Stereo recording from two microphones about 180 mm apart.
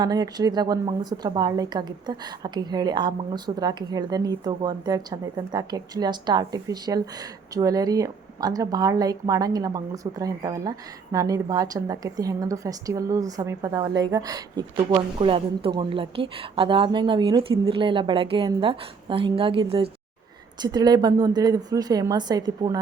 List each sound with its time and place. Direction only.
0.0 s a woman's voice: 20° right (ahead or behind)